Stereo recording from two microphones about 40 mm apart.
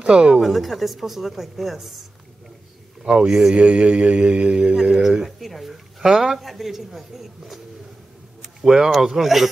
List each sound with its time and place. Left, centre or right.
0.0 s a woman's voice: right
0.4 s speech: centre
3.1 s speech: right
5.2 s speech: centre